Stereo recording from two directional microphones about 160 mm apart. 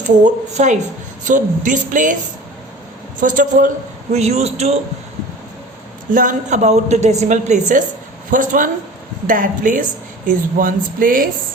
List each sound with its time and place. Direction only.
0.2 s a woman's voice: 50° right (ahead or behind)
3.2 s a woman's voice: 55° right (ahead or behind)
4.1 s a woman's voice: 45° right (ahead or behind)
6.1 s a woman's voice: 55° right (ahead or behind)